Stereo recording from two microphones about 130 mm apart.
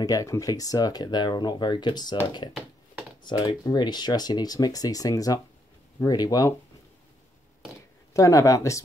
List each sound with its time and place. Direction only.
0.0 s speech: 25° left (ahead or behind)
3.3 s speech: 30° left (ahead or behind)
8.1 s speech: 25° left (ahead or behind)